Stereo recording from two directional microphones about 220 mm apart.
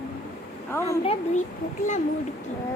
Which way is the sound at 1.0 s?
25° left (ahead or behind).